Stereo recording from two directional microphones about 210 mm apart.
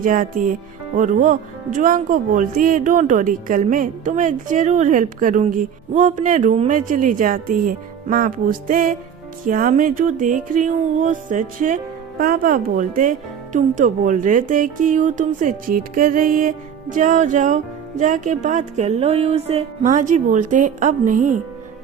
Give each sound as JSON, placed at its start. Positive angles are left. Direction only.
{"t": 0.0, "sound": "speech", "side_deg": -40}